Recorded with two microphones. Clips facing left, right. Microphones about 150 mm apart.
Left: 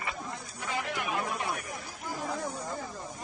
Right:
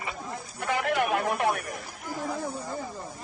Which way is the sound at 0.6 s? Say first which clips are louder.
Right 8 dB; 65° right (ahead or behind).